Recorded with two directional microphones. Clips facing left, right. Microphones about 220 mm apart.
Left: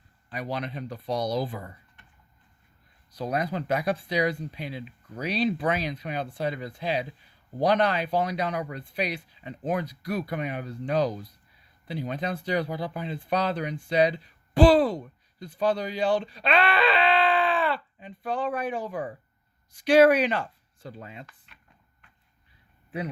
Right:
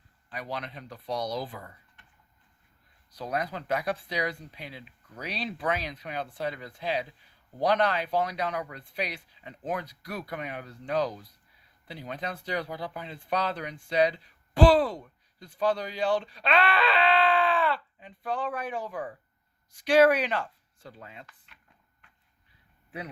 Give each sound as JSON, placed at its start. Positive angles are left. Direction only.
{"t": 0.3, "sound": "speech", "side_deg": 20}
{"t": 0.9, "sound": "speech", "side_deg": 25}
{"t": 3.2, "sound": "speech", "side_deg": 20}
{"t": 3.4, "sound": "speech", "side_deg": 10}
{"t": 8.5, "sound": "speech", "side_deg": 15}
{"t": 9.0, "sound": "speech", "side_deg": 0}
{"t": 18.9, "sound": "speech", "side_deg": 15}
{"t": 19.8, "sound": "speech", "side_deg": 0}